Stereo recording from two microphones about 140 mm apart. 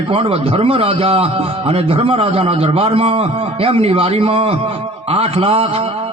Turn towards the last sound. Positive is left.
turn(degrees=-45)  # may be behind; listen again after turning